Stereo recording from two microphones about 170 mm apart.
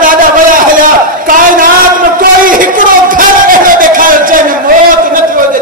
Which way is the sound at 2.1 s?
55° right (ahead or behind).